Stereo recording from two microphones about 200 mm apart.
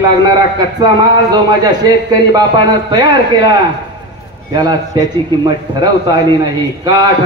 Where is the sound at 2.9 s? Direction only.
20° right (ahead or behind).